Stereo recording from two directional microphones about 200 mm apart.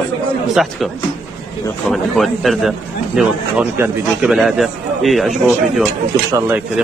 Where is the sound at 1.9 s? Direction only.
Centre (ahead or behind).